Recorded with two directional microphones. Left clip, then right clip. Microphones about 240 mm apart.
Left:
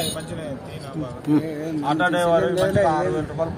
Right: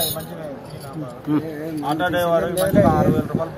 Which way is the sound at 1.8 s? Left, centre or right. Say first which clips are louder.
Even; left.